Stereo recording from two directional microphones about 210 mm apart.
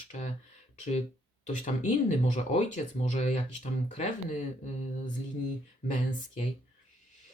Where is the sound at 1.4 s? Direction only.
35° left (ahead or behind).